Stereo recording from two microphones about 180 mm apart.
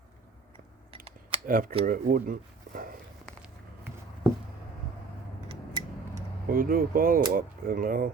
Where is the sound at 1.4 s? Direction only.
50° right (ahead or behind).